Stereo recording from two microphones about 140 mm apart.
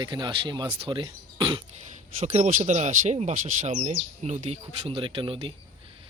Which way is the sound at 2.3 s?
50° right (ahead or behind).